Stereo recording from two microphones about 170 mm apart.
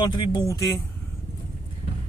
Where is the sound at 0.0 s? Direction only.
25° left (ahead or behind).